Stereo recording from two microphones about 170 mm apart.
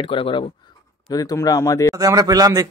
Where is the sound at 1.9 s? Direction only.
20° right (ahead or behind).